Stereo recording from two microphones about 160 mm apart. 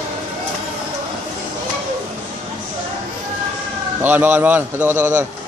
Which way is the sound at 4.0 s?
10° right (ahead or behind).